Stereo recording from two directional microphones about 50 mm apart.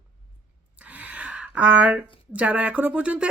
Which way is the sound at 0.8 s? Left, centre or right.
Right.